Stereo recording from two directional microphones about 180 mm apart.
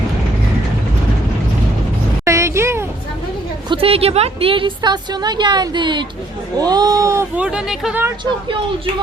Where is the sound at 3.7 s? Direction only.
30° right (ahead or behind); by 8.0 s 5° right (ahead or behind).